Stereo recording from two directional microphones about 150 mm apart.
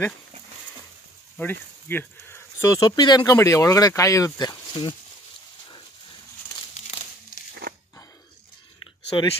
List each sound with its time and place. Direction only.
1.3 s speech: 10° left (ahead or behind); by 4.9 s 30° left (ahead or behind)
9.1 s speech: 30° left (ahead or behind)